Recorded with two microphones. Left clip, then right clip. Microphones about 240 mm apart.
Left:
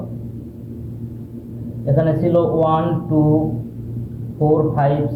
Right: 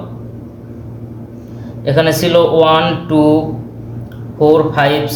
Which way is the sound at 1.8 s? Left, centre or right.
Right.